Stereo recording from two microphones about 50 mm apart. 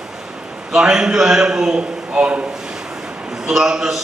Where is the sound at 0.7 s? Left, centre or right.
Centre.